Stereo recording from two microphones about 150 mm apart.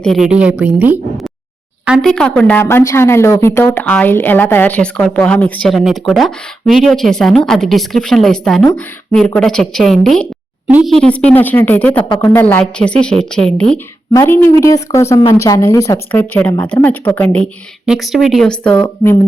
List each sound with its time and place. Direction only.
0.0 s a woman's voice: centre (ahead or behind)
2.0 s a woman's voice: 5° left (ahead or behind)
14.1 s a woman's voice: 20° left (ahead or behind)
17.8 s a woman's voice: 5° right (ahead or behind)